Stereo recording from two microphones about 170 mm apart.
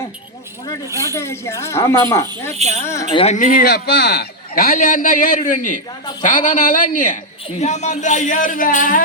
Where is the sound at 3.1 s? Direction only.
40° left (ahead or behind).